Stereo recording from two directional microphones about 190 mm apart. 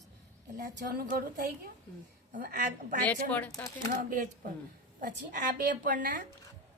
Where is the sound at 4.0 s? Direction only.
45° right (ahead or behind).